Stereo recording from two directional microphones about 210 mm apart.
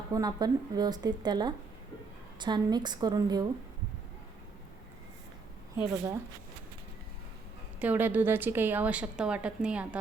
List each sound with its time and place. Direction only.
0.1 s speech: 20° right (ahead or behind)
5.7 s a woman's voice: 15° right (ahead or behind)
7.8 s a woman's voice: 10° right (ahead or behind)